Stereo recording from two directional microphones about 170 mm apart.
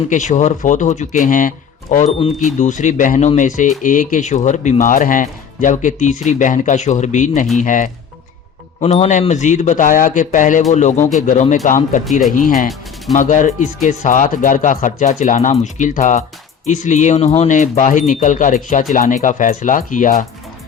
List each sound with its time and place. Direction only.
0.1 s speech: 45° left (ahead or behind)
2.1 s speech: 40° left (ahead or behind)
13.1 s speech: 50° left (ahead or behind)